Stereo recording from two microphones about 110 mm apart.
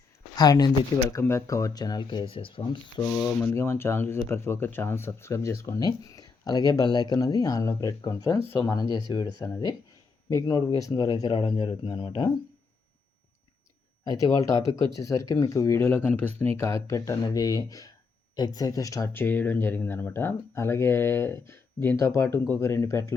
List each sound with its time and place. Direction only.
0.3 s speech: 40° left (ahead or behind)
1.2 s speech: 25° left (ahead or behind); by 2.7 s 50° left (ahead or behind)
3.0 s speech: 25° left (ahead or behind); by 12.3 s 45° left (ahead or behind)
14.2 s speech: 30° left (ahead or behind)
19.1 s speech: 20° left (ahead or behind)